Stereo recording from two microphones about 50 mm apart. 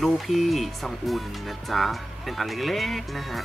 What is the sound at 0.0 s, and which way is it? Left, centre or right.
Speech, centre.